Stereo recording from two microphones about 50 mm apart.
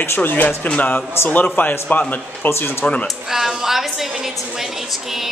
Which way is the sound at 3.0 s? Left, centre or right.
Centre.